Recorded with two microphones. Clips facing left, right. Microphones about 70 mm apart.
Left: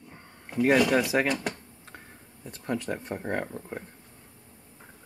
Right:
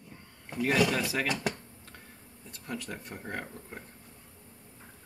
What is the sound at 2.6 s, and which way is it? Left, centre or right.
Speech, left.